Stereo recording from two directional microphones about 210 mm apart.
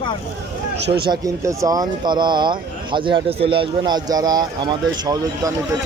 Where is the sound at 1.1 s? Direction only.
15° right (ahead or behind).